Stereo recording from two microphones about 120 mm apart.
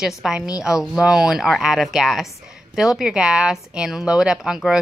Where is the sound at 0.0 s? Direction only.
5° right (ahead or behind).